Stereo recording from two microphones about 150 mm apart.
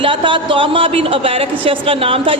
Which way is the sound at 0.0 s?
35° right (ahead or behind).